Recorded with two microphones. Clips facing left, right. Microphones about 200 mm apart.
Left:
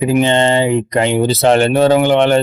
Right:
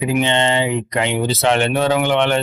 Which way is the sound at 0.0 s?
40° left (ahead or behind).